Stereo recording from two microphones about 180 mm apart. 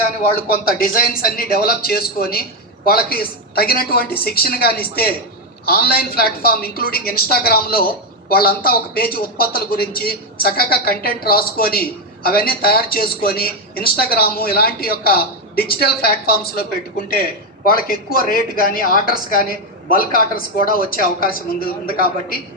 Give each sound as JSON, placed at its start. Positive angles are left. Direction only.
{"t": 0.2, "sound": "a woman's voice", "side_deg": 55}
{"t": 17.7, "sound": "a woman's voice", "side_deg": 55}